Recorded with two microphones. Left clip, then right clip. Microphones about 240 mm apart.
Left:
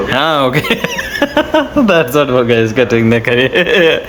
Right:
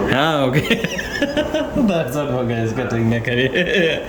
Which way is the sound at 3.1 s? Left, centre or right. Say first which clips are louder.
Left 8 dB; centre.